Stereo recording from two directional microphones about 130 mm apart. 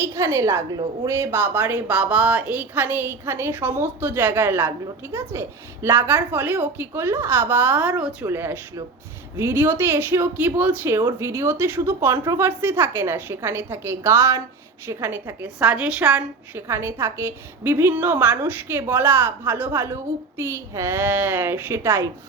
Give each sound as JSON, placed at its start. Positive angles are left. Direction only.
{"t": 0.0, "sound": "a woman's voice", "side_deg": -20}